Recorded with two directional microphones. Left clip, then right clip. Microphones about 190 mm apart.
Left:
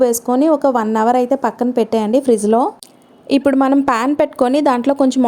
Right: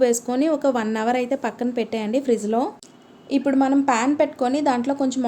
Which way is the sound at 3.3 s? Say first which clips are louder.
Left 6 dB; 45° left (ahead or behind).